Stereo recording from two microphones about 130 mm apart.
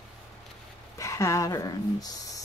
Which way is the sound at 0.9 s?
25° left (ahead or behind).